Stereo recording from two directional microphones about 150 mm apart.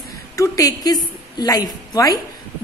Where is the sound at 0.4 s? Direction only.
25° left (ahead or behind).